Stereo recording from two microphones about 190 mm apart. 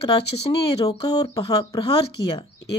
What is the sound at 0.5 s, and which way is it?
Speech, 20° left (ahead or behind).